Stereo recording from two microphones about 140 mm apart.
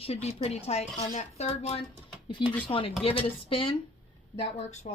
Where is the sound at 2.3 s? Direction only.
35° left (ahead or behind).